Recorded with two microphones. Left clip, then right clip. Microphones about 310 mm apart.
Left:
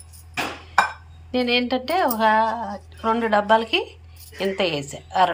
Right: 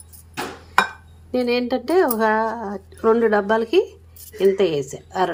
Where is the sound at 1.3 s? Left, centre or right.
Centre.